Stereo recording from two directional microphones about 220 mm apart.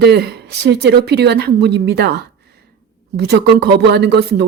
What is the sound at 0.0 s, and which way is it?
Speech, 45° right (ahead or behind).